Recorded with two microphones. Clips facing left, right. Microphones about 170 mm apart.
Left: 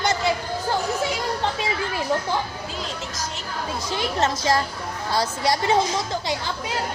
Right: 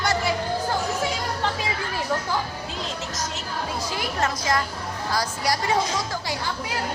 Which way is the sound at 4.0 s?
25° left (ahead or behind).